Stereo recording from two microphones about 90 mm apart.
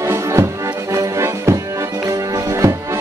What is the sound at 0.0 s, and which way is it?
Music, 30° right (ahead or behind).